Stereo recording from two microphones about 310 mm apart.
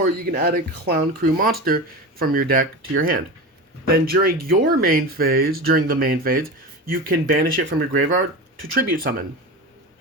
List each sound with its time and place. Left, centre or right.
0.3 s speech: right